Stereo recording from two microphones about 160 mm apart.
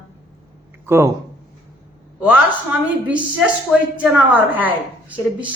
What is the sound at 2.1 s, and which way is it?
Speech, 10° right (ahead or behind).